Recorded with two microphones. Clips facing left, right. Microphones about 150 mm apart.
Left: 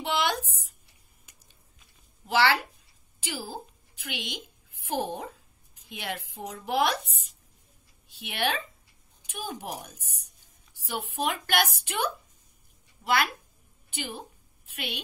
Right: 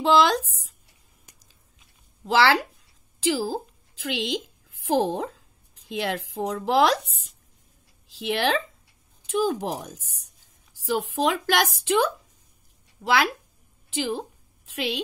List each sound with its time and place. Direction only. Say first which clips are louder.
0.0 s speech: right 9 dB; 90° right
2.2 s a woman's voice: right 4 dB; 90° right
8.1 s a woman's voice: right 6 dB; 90° right
10.9 s a woman's voice: right 7 dB; 90° right